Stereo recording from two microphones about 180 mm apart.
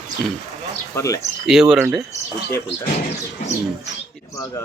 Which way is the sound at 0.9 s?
20° left (ahead or behind).